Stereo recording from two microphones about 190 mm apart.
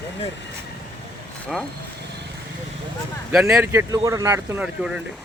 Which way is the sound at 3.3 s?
5° right (ahead or behind).